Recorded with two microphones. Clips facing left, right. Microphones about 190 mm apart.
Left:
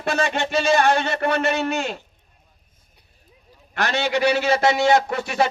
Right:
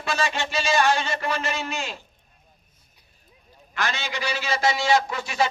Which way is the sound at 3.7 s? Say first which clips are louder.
Left 7 dB; 65° left (ahead or behind).